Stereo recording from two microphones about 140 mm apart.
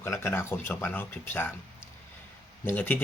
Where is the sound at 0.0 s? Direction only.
20° left (ahead or behind).